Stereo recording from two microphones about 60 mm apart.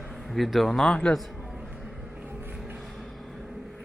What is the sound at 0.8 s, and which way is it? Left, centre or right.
Speech, centre.